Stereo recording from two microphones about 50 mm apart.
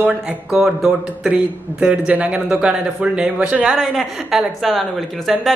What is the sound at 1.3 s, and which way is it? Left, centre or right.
A woman's voice, right.